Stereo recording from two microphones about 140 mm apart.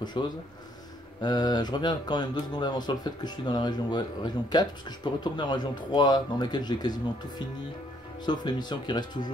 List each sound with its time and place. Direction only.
0.2 s speech: 35° left (ahead or behind)